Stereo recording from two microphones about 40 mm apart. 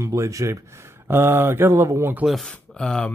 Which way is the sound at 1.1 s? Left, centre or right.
Right.